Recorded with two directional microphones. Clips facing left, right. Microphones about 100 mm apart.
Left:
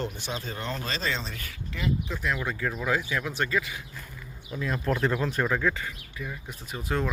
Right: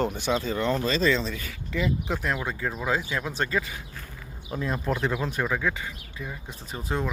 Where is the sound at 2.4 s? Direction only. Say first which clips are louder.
Even; 25° right (ahead or behind).